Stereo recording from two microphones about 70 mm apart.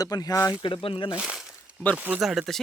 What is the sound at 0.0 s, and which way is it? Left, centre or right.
Speech, left.